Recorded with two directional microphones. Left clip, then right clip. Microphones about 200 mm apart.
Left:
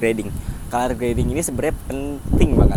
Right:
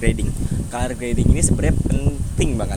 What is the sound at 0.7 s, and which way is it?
Speech, 15° left (ahead or behind).